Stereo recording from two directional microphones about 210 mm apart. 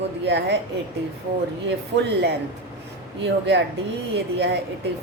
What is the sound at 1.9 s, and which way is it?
A woman's voice, 55° right (ahead or behind).